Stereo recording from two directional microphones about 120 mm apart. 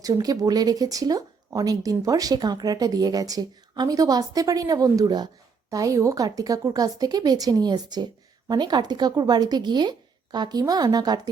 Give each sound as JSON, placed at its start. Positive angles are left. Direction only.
{"t": 0.0, "sound": "speech", "side_deg": -30}